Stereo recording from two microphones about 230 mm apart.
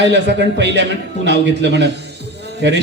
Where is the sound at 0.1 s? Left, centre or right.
Right.